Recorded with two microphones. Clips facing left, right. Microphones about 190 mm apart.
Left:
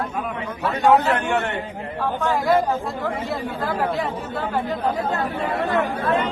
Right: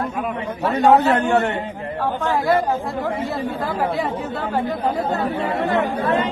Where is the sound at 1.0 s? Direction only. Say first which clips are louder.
Right 4 dB; 35° right (ahead or behind).